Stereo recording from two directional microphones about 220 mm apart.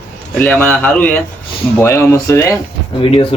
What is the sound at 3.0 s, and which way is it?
Speech, 25° left (ahead or behind).